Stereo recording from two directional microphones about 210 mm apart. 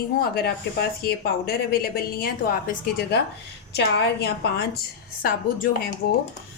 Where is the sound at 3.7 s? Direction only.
50° left (ahead or behind).